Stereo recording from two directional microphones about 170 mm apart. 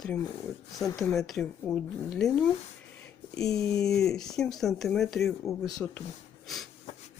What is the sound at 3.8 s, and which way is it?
Speech, centre (ahead or behind).